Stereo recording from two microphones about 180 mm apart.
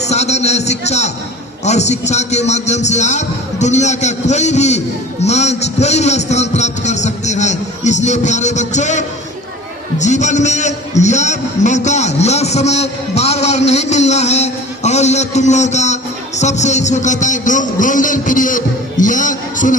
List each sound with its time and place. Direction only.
0.0 s a man's voice: 40° left (ahead or behind)